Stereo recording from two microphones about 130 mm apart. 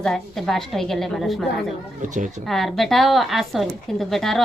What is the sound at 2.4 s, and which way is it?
Speech, centre (ahead or behind).